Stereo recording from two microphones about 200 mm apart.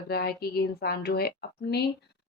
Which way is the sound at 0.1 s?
50° left (ahead or behind).